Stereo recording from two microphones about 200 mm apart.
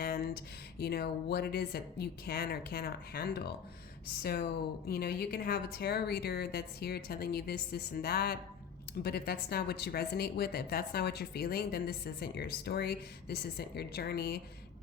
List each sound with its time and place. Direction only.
0.8 s speech: 55° left (ahead or behind)